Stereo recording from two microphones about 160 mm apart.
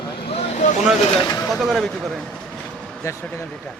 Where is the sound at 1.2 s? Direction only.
20° left (ahead or behind).